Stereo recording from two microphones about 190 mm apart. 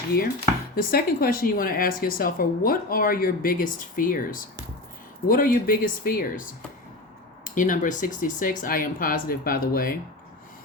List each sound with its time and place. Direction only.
0.8 s speech: 50° left (ahead or behind)
7.4 s speech: 45° left (ahead or behind)